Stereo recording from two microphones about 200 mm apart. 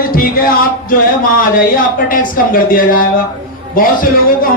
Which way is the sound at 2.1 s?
45° left (ahead or behind).